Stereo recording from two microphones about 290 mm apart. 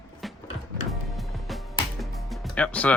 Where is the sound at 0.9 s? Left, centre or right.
Centre.